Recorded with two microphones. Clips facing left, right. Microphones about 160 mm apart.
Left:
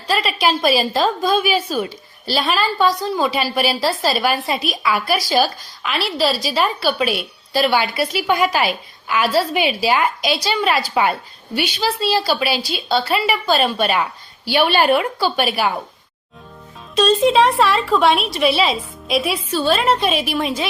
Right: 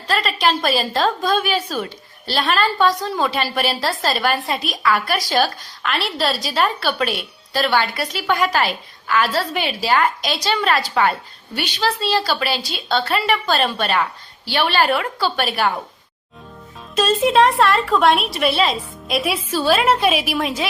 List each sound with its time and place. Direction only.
0.1 s a woman's voice: 10° left (ahead or behind)
16.9 s a woman's voice: 5° right (ahead or behind)